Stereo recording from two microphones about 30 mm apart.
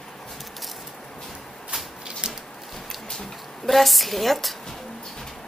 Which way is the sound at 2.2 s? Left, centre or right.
Right.